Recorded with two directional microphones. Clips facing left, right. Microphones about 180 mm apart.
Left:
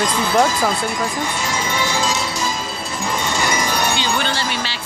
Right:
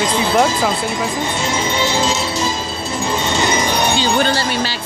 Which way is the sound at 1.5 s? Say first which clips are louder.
Right 4 dB; 25° right (ahead or behind).